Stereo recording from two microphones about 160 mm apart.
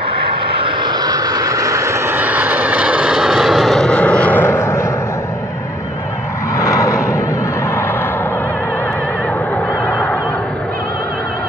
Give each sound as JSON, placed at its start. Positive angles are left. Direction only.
{"t": 0.6, "sound": "vehicle", "side_deg": -30}
{"t": 6.5, "sound": "vehicle", "side_deg": 20}
{"t": 9.8, "sound": "a sound", "side_deg": 5}